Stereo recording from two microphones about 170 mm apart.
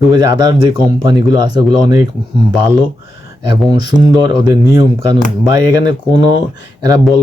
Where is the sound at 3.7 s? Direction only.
25° right (ahead or behind).